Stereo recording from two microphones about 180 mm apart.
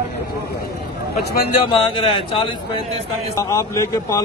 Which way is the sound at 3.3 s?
15° left (ahead or behind).